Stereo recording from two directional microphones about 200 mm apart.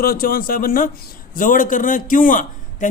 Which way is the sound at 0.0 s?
45° left (ahead or behind).